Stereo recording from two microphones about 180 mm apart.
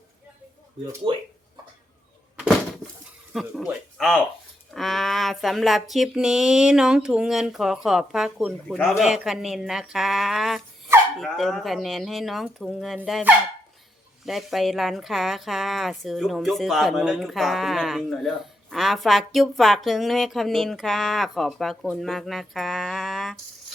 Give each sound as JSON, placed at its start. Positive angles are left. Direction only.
{"t": 1.0, "sound": "speech", "side_deg": -25}
{"t": 2.3, "sound": "a sound", "side_deg": -5}
{"t": 3.3, "sound": "speech", "side_deg": 0}
{"t": 14.3, "sound": "speech", "side_deg": 0}